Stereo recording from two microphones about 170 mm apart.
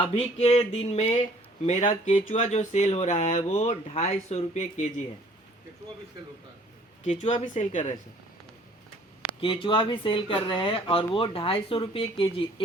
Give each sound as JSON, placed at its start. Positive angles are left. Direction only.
{"t": 0.0, "sound": "speech", "side_deg": 40}
{"t": 7.0, "sound": "speech", "side_deg": 45}
{"t": 9.4, "sound": "speech", "side_deg": 30}